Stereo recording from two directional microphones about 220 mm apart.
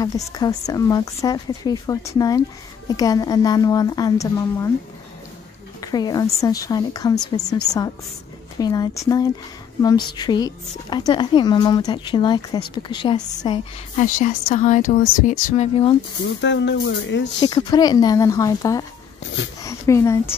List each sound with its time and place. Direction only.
0.0 s speech: 15° left (ahead or behind)
5.8 s speech: 20° left (ahead or behind)
8.5 s a woman's voice: 15° left (ahead or behind)
13.9 s speech: 35° left (ahead or behind)
16.3 s speech: 55° left (ahead or behind)
17.4 s speech: 20° left (ahead or behind)